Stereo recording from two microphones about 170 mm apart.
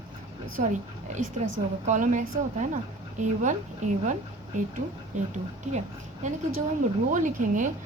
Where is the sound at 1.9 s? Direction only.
45° right (ahead or behind).